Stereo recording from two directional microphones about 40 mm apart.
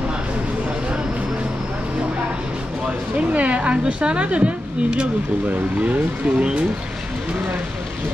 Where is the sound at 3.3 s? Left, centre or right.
Right.